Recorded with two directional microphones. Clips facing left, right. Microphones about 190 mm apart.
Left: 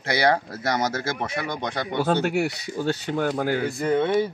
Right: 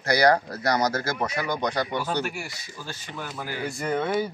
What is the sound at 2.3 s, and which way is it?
Speech, 65° left (ahead or behind).